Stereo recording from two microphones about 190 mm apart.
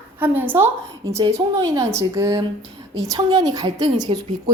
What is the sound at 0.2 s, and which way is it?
A woman's voice, 10° right (ahead or behind).